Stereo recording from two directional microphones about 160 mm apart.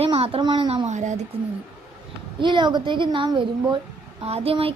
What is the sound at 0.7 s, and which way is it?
Speech, 45° right (ahead or behind).